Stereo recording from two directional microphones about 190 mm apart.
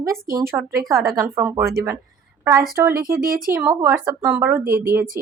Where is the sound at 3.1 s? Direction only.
15° right (ahead or behind).